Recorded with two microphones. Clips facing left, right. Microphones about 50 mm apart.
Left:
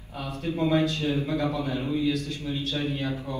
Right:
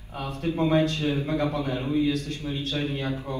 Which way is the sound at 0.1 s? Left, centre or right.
Right.